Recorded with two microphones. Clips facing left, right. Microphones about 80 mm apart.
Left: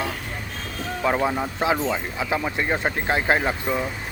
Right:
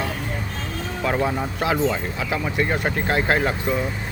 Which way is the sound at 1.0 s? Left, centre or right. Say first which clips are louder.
Even; centre.